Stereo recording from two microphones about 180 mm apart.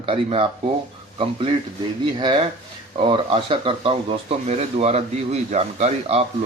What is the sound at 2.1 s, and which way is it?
Speech, 25° right (ahead or behind).